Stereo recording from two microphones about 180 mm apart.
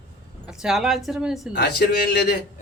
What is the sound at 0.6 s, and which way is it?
Speech, centre (ahead or behind).